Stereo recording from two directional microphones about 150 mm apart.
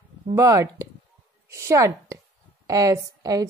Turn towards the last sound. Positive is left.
turn(degrees=-25)  # may be behind; listen again after turning